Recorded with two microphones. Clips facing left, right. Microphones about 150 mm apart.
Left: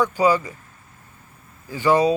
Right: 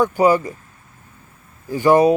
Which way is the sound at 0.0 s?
50° right (ahead or behind).